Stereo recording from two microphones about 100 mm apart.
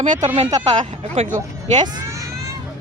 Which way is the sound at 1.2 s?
75° right (ahead or behind).